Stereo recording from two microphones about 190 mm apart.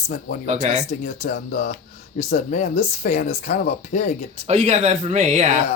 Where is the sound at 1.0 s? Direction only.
40° left (ahead or behind).